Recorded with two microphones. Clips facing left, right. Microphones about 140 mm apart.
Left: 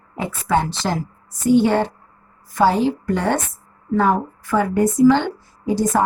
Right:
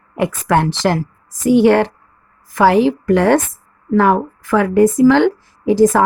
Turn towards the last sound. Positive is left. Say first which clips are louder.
# right 8 dB
turn(degrees=-90)